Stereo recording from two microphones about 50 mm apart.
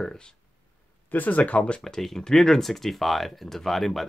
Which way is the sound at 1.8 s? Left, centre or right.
Centre.